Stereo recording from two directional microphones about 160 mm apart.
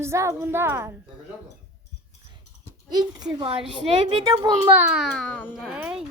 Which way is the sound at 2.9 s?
25° right (ahead or behind).